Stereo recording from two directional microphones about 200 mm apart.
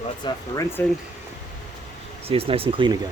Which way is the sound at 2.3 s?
25° right (ahead or behind).